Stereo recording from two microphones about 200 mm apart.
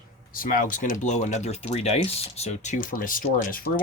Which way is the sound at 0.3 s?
45° left (ahead or behind).